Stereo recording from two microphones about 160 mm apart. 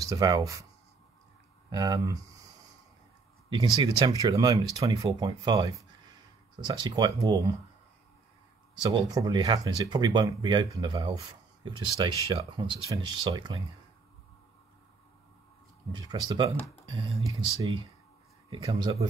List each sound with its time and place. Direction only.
0.0 s speech: 20° right (ahead or behind)
1.7 s speech: 25° right (ahead or behind)
3.4 s speech: 25° right (ahead or behind)
8.9 s speech: 25° right (ahead or behind)
15.9 s speech: 30° right (ahead or behind)
18.5 s speech: 35° right (ahead or behind)